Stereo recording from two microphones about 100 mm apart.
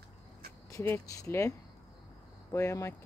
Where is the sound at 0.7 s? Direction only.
25° left (ahead or behind).